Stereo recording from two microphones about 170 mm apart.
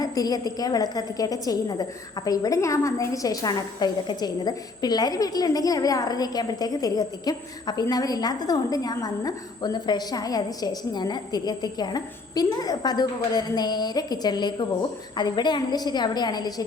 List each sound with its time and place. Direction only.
0.0 s a woman's voice: 20° left (ahead or behind)